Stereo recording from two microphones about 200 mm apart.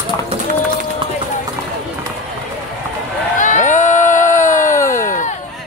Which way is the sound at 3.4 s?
40° left (ahead or behind).